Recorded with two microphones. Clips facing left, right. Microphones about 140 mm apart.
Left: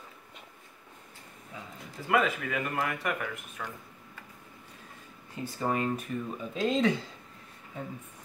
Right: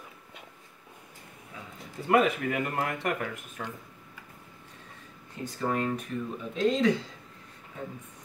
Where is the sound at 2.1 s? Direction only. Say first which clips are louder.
Right 3 dB; 30° right (ahead or behind).